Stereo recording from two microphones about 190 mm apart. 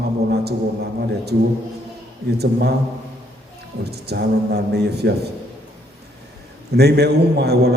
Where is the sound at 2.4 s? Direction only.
60° right (ahead or behind).